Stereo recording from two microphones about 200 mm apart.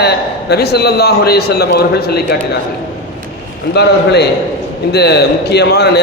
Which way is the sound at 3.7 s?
55° left (ahead or behind).